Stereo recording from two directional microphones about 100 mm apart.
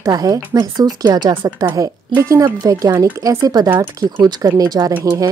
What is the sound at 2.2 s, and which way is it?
Speech, 35° right (ahead or behind).